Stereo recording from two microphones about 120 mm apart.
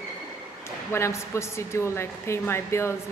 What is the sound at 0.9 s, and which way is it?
A woman's voice, 25° left (ahead or behind).